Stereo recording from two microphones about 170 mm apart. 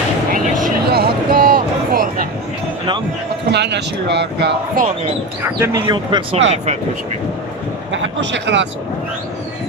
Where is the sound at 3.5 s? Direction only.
90° right.